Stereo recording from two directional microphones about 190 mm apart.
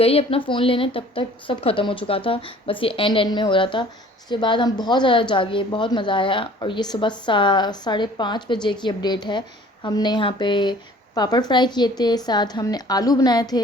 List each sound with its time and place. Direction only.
0.0 s a woman's voice: 30° left (ahead or behind)